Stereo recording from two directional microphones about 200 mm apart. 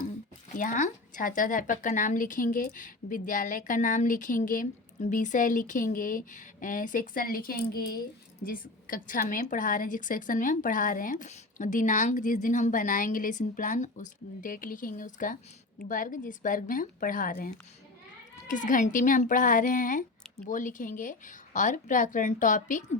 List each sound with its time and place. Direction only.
0.5 s a woman's voice: 40° left (ahead or behind)